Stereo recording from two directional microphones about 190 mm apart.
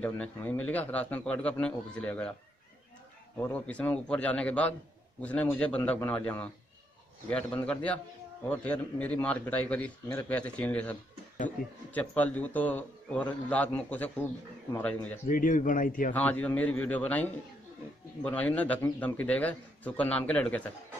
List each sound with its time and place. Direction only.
0.0 s a man's voice: 10° left (ahead or behind)
3.3 s a man's voice: 10° left (ahead or behind)
15.2 s speech: 45° left (ahead or behind)
16.1 s a man's voice: 10° left (ahead or behind)